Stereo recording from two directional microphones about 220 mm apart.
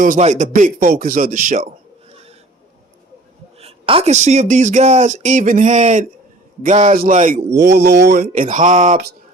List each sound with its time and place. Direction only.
0.0 s speech: 35° right (ahead or behind)
3.6 s speech: 25° right (ahead or behind)
7.5 s speech: 50° right (ahead or behind)